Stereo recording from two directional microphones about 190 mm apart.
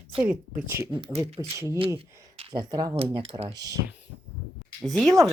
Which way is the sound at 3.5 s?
20° right (ahead or behind).